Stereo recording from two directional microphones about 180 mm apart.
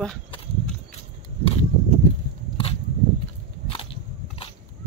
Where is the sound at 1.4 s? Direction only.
30° left (ahead or behind).